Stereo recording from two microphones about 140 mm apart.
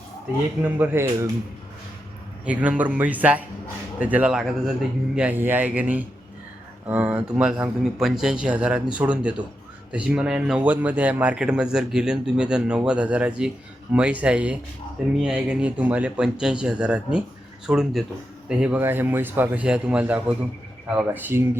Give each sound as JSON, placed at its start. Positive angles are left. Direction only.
{"t": 0.6, "sound": "speech", "side_deg": -15}
{"t": 2.4, "sound": "speech", "side_deg": -10}